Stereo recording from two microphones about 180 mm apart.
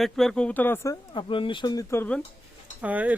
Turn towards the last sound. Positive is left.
turn(degrees=-10)  # may be behind; listen again after turning